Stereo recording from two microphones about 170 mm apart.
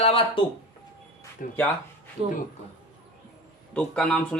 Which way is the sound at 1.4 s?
55° left (ahead or behind).